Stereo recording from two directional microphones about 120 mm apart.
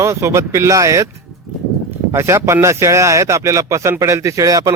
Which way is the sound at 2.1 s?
25° right (ahead or behind).